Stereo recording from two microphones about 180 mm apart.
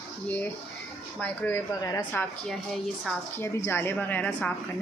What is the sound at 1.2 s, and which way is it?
A woman's voice, 10° left (ahead or behind).